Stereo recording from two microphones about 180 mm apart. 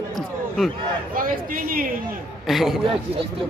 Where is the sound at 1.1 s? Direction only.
50° right (ahead or behind).